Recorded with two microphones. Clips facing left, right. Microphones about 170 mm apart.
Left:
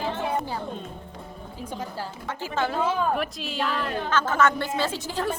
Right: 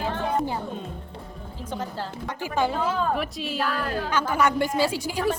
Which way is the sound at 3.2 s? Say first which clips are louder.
Right 1 dB; centre (ahead or behind).